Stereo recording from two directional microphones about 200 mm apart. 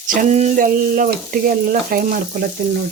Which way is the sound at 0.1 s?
40° right (ahead or behind).